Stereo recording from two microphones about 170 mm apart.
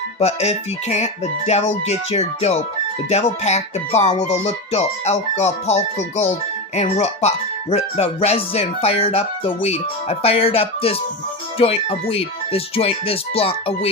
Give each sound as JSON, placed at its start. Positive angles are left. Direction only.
{"t": 0.2, "sound": "speech", "side_deg": 40}